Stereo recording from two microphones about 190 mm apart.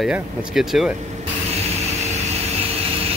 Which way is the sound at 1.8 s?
35° right (ahead or behind).